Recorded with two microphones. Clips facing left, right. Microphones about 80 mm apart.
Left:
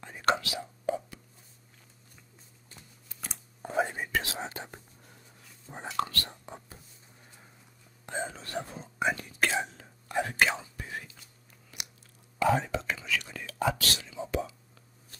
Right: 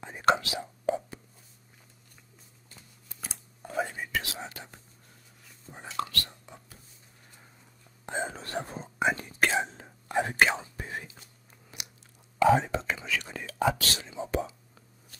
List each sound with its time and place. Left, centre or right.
0.4 s speech: right
2.7 s a sound: centre
3.6 s whispering: left
5.7 s speech: left
8.0 s whispering: right
11.7 s biting: right
12.5 s whispering: right